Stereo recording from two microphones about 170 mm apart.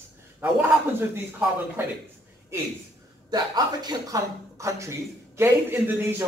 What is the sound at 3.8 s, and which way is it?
Speech, 20° right (ahead or behind).